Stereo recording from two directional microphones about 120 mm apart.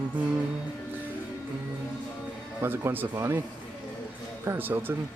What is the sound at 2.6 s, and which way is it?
Speech, 20° right (ahead or behind).